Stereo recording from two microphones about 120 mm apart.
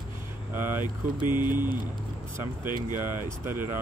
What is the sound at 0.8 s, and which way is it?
Speech, 40° left (ahead or behind).